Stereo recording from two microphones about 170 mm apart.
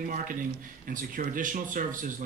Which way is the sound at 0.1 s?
50° right (ahead or behind).